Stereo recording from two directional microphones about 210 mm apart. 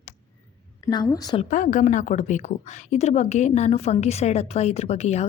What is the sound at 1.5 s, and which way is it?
A woman's voice, 35° left (ahead or behind).